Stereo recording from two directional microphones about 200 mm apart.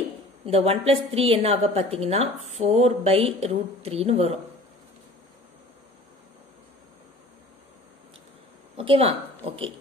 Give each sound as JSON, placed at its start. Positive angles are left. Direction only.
{"t": 0.5, "sound": "a woman's voice", "side_deg": -30}
{"t": 8.7, "sound": "speech", "side_deg": -30}